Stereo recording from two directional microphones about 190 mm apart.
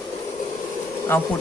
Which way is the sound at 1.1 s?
10° left (ahead or behind).